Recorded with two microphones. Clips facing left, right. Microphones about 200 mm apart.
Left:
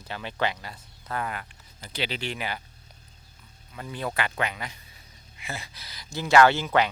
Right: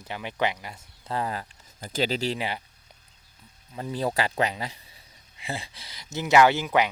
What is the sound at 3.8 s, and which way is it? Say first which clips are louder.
Speech: right 4 dB; 30° right (ahead or behind).